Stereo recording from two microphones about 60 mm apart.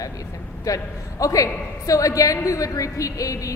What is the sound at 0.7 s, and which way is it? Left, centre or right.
A woman's voice, left.